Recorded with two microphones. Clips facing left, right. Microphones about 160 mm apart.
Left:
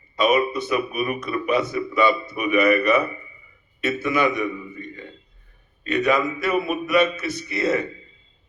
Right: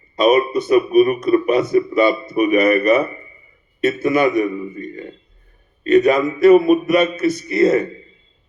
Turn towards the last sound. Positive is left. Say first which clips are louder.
# right 8 dB
turn(degrees=-45)  # may be behind; listen again after turning